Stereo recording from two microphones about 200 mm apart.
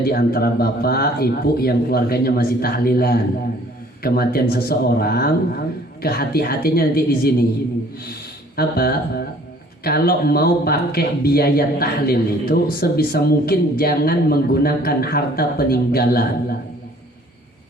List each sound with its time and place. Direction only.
0.0 s speech: 50° left (ahead or behind)
8.5 s speech: 50° left (ahead or behind)